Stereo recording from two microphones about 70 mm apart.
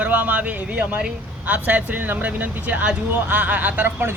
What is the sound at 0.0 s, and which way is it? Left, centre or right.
Speech, right.